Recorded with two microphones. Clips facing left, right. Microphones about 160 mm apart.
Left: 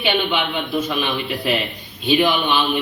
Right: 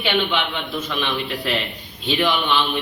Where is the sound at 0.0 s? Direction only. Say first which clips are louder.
Left 1 dB; 15° left (ahead or behind).